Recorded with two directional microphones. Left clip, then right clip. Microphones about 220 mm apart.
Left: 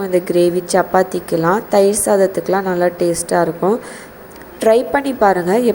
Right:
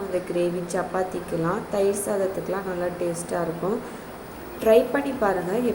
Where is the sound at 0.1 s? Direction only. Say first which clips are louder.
Left 11 dB; 45° left (ahead or behind).